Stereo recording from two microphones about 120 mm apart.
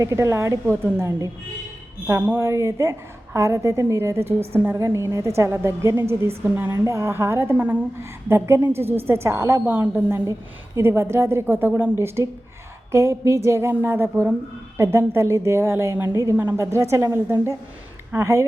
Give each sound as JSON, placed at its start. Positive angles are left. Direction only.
{"t": 0.0, "sound": "a woman's voice", "side_deg": -25}